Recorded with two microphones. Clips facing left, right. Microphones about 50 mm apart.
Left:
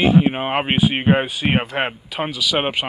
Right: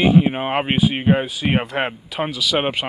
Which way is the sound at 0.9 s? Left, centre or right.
Left.